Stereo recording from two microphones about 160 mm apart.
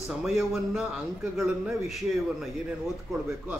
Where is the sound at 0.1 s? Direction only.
Centre (ahead or behind).